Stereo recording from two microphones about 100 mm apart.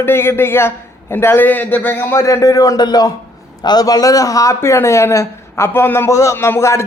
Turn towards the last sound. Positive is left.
turn(degrees=30)  # may be behind; listen again after turning